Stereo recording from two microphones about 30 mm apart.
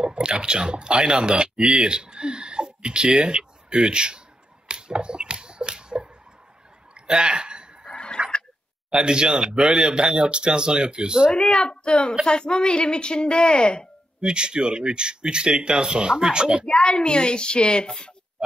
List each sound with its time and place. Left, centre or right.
0.0 s speech: right
4.6 s finger snapping: right
6.9 s a sound: right
8.9 s speech: right
11.5 s a woman's voice: left
14.2 s speech: right
16.6 s a woman's voice: left